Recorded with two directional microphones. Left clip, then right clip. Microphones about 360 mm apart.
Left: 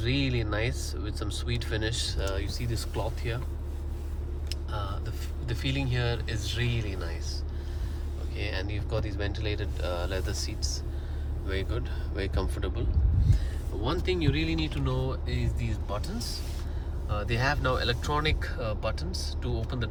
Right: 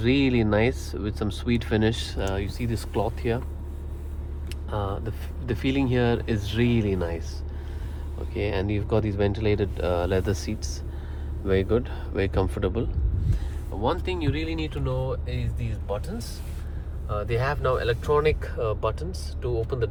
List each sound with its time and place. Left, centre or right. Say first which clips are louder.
0.0 s speech: right 8 dB; centre
4.7 s speech: right 8 dB; centre
8.3 s speech: right 8 dB; centre
13.8 s speech: right 3 dB; centre
17.1 s speech: right 2 dB; centre